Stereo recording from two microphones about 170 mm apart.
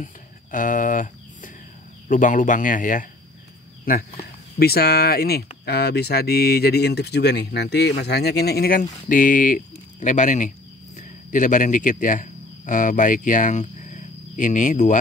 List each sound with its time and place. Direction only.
0.0 s a sound: 50° left (ahead or behind)
2.0 s speech: 50° left (ahead or behind)
3.8 s speech: 60° left (ahead or behind)
9.1 s speech: 50° left (ahead or behind)